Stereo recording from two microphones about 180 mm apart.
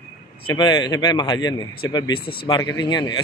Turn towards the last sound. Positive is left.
turn(degrees=25)  # may be behind; listen again after turning